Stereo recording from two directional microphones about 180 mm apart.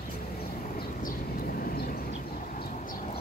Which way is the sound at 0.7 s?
55° left (ahead or behind).